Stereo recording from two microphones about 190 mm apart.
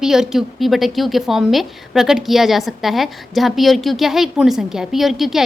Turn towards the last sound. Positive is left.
turn(degrees=0)  # may be behind; listen again after turning